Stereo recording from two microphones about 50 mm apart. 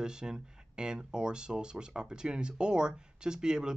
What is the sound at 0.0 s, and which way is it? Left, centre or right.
Speech, centre.